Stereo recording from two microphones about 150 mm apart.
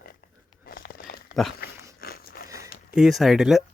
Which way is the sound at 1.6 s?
90° left.